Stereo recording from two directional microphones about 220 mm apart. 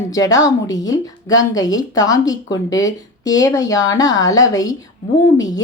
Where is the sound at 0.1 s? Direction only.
15° left (ahead or behind).